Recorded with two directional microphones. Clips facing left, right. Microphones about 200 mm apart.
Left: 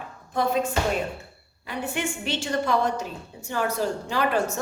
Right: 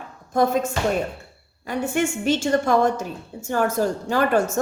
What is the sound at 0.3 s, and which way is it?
A woman's voice, 45° right (ahead or behind).